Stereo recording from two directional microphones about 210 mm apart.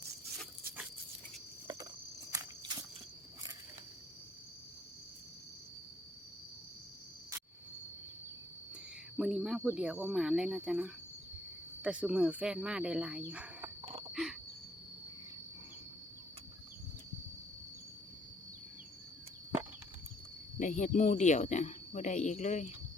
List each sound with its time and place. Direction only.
2.3 s walk: 15° right (ahead or behind)
8.7 s speech: centre (ahead or behind)
14.1 s a sound: centre (ahead or behind)
20.6 s speech: 35° left (ahead or behind)